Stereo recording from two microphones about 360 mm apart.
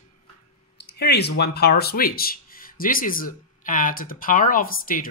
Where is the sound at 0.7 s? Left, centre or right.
Left.